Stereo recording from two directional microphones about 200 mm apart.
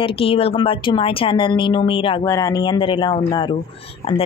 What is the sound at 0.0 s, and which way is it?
Speech, 30° left (ahead or behind).